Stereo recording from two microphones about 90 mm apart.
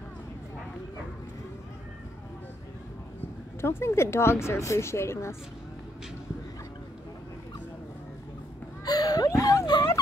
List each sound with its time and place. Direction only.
3.6 s a woman's voice: 30° left (ahead or behind)
8.8 s whimper: 50° left (ahead or behind)